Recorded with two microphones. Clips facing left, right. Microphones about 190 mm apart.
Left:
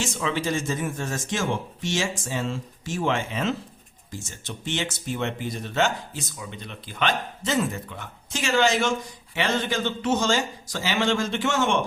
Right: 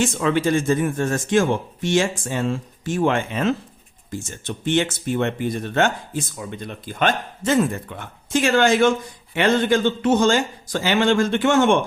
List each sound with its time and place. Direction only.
0.0 s speech: 55° right (ahead or behind)